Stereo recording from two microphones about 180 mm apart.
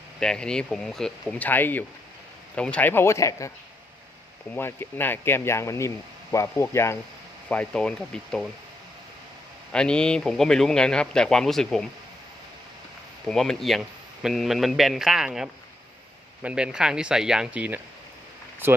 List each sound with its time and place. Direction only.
0.2 s speech: 5° left (ahead or behind)
4.5 s speech: 10° left (ahead or behind)
9.7 s speech: 5° left (ahead or behind)
13.2 s speech: centre (ahead or behind)